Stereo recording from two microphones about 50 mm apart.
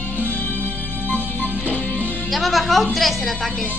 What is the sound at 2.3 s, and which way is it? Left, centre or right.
A woman's voice, centre.